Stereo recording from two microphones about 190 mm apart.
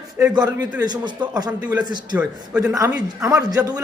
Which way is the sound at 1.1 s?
5° right (ahead or behind).